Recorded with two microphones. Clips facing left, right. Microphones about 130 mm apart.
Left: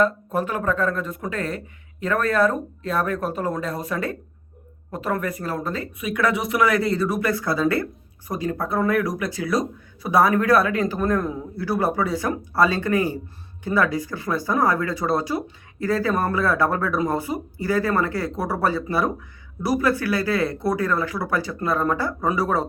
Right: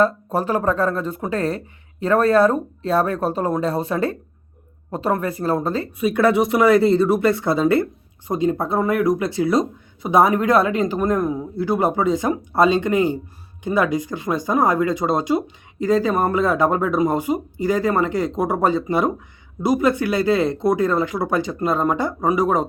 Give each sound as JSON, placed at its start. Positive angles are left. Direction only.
{"t": 0.0, "sound": "speech", "side_deg": -35}